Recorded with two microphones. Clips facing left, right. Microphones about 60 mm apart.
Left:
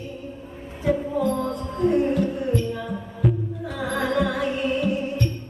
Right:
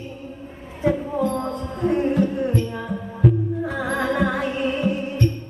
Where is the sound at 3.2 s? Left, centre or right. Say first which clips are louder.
Right 4 dB; centre.